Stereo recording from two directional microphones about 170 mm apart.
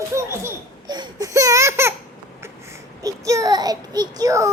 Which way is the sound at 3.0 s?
20° right (ahead or behind).